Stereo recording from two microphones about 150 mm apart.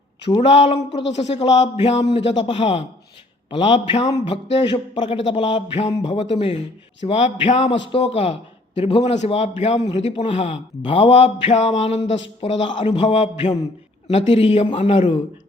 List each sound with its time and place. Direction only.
0.3 s speech: 35° left (ahead or behind)